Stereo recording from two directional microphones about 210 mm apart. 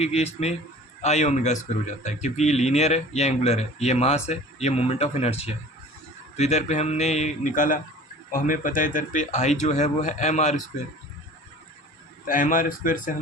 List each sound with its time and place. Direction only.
0.0 s speech: 30° left (ahead or behind)
12.2 s speech: 40° left (ahead or behind)